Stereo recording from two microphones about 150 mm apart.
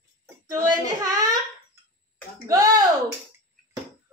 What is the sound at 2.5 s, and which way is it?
Speech, 25° right (ahead or behind).